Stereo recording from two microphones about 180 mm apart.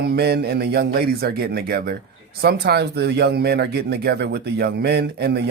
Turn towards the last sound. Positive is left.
turn(degrees=-65)  # may be behind; listen again after turning